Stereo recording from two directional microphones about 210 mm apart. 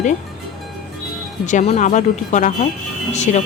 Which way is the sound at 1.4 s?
35° left (ahead or behind).